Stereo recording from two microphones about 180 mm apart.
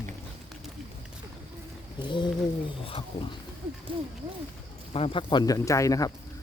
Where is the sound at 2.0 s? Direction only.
25° left (ahead or behind).